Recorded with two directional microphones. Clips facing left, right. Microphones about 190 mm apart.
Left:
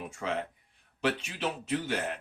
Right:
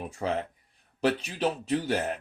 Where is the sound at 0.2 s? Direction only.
35° right (ahead or behind).